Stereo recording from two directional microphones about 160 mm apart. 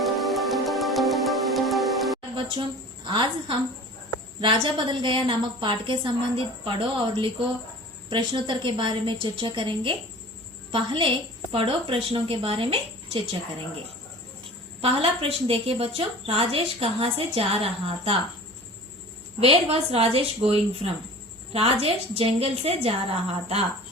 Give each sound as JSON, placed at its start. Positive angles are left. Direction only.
{"t": 0.0, "sound": "music", "side_deg": 0}
{"t": 3.1, "sound": "a woman's voice", "side_deg": -30}
{"t": 14.8, "sound": "a woman's voice", "side_deg": -35}
{"t": 19.4, "sound": "a woman's voice", "side_deg": -40}